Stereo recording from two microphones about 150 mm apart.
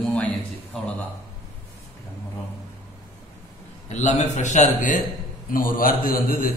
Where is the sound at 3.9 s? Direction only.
50° left (ahead or behind).